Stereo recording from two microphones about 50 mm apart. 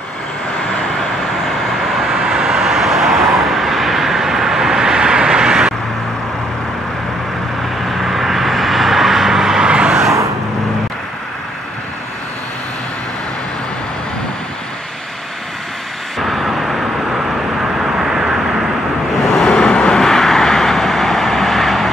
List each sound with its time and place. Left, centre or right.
2.0 s vehicle: centre
8.0 s vehicle: centre
16.2 s vehicle: centre
17.7 s vehicle: centre
19.3 s vehicle: centre
20.0 s vehicle: centre